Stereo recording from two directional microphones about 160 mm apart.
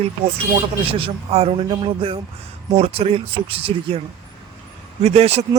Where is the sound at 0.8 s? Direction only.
35° right (ahead or behind).